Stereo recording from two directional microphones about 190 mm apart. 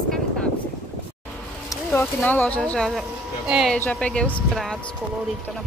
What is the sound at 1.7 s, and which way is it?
Speech, 10° left (ahead or behind).